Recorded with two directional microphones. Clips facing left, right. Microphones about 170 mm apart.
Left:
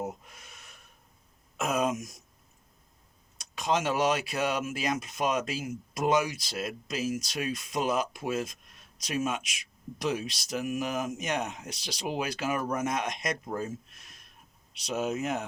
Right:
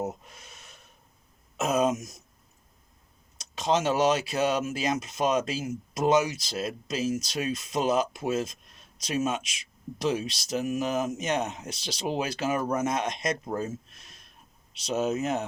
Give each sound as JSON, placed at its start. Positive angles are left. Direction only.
{"t": 1.5, "sound": "speech", "side_deg": -25}
{"t": 3.3, "sound": "speech", "side_deg": -25}